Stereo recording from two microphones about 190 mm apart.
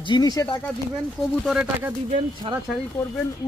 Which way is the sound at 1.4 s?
5° right (ahead or behind).